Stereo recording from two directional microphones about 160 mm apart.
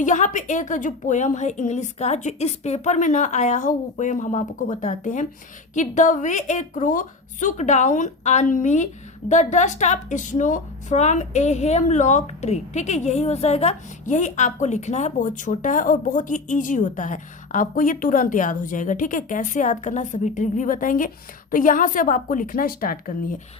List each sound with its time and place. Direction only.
0.0 s a woman's voice: 50° left (ahead or behind)